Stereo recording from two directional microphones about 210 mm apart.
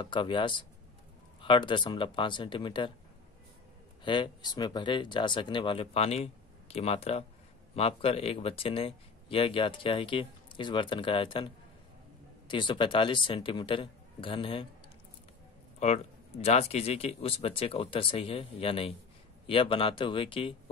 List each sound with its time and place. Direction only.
0.0 s speech: 25° left (ahead or behind)
4.0 s speech: 25° left (ahead or behind)
15.8 s speech: 30° left (ahead or behind)